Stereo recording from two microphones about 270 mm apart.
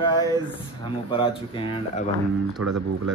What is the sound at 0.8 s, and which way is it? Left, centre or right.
Speech, centre.